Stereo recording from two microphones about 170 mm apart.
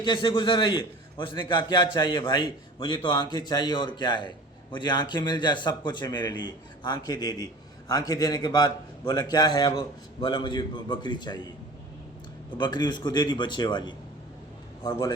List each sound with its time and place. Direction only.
0.0 s a man's voice: 25° left (ahead or behind)
12.5 s a man's voice: 25° left (ahead or behind)